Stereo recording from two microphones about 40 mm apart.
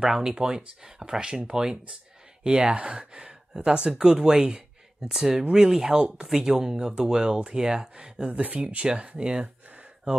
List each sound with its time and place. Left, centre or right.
0.0 s speech: centre
5.9 s speech: right
6.2 s speech: centre
8.3 s speech: right
8.6 s speech: right